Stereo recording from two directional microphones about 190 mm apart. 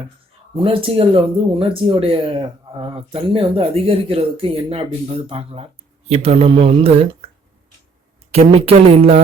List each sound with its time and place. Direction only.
0.5 s speech: 30° right (ahead or behind)
8.3 s speech: 30° right (ahead or behind)